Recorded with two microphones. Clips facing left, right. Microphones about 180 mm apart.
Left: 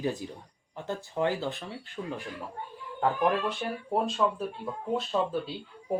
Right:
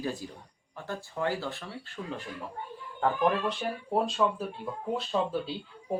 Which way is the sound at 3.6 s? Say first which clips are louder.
Even; centre (ahead or behind).